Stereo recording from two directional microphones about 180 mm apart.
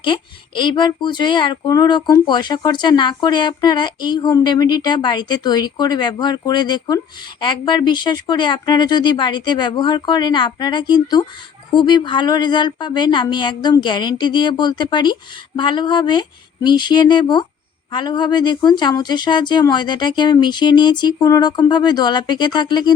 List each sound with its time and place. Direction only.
0.0 s speech: 25° left (ahead or behind)